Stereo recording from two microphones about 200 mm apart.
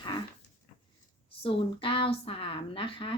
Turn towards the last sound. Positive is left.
turn(degrees=25)  # may be behind; listen again after turning